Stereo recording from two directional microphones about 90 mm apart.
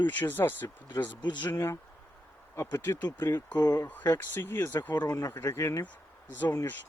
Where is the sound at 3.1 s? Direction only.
25° left (ahead or behind).